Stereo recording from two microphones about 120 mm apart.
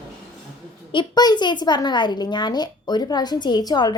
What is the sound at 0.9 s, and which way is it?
A woman's voice, 40° left (ahead or behind).